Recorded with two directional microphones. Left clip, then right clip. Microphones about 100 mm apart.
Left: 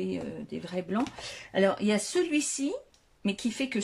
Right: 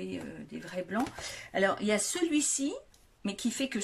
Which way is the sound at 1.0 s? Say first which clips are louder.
Left 1 dB; 20° left (ahead or behind).